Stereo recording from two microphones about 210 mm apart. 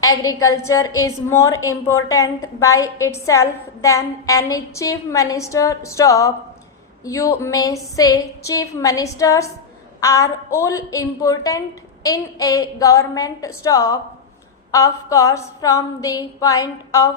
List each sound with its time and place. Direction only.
0.0 s a woman's voice: 15° left (ahead or behind)